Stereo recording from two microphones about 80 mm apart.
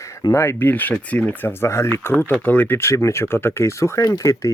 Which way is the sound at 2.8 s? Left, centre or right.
Left.